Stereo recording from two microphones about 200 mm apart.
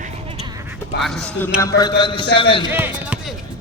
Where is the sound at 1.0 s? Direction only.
5° left (ahead or behind).